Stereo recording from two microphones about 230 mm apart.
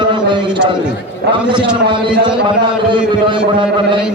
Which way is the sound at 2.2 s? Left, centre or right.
Right.